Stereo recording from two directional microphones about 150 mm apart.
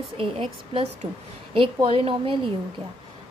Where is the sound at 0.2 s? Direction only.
35° right (ahead or behind).